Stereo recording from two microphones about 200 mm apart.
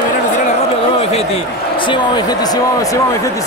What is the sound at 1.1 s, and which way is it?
Speech, 25° left (ahead or behind).